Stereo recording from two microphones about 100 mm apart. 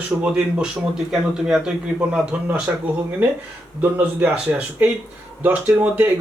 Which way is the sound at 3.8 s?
15° right (ahead or behind).